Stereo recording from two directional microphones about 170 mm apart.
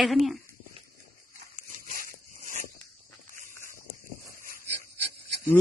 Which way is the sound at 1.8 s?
55° right (ahead or behind).